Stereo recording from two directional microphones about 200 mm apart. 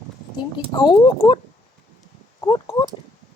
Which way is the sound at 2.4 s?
15° left (ahead or behind).